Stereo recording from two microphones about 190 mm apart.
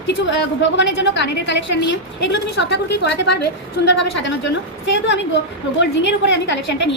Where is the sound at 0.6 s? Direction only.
65° left (ahead or behind).